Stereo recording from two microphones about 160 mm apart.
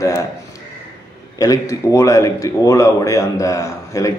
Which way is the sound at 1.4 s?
20° left (ahead or behind).